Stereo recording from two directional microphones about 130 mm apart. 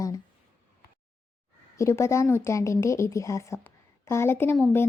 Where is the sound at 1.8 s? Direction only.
20° left (ahead or behind).